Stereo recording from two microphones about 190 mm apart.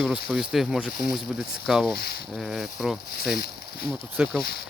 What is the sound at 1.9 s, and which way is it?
Speech, 55° left (ahead or behind).